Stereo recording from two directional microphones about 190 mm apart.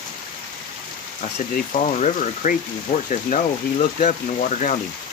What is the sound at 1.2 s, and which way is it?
Speech, 40° left (ahead or behind).